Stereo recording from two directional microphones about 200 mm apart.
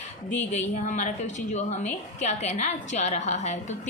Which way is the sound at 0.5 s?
35° left (ahead or behind).